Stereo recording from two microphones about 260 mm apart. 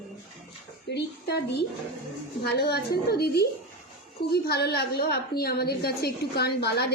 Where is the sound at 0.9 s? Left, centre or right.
Left.